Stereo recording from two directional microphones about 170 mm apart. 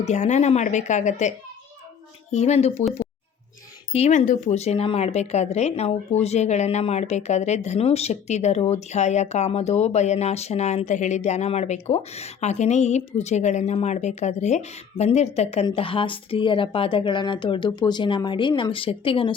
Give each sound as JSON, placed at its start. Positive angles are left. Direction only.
{"t": 0.0, "sound": "speech", "side_deg": 45}
{"t": 2.3, "sound": "speech", "side_deg": 40}
{"t": 3.9, "sound": "speech", "side_deg": 40}